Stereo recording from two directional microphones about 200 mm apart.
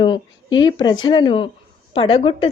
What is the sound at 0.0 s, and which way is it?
A woman's voice, 25° left (ahead or behind).